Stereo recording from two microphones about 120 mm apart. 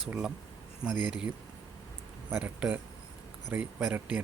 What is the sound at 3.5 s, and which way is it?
Speech, 10° right (ahead or behind).